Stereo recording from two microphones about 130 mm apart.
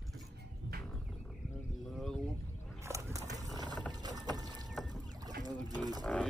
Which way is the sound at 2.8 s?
20° right (ahead or behind).